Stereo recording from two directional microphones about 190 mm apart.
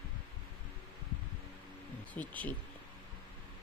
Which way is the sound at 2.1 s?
10° left (ahead or behind).